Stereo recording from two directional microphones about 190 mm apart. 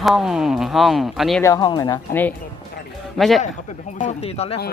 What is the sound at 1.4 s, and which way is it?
Speech, 15° left (ahead or behind).